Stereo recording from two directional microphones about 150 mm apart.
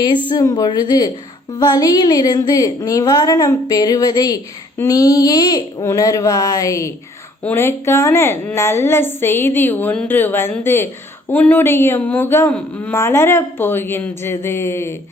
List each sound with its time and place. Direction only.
0.3 s a woman's voice: 25° left (ahead or behind)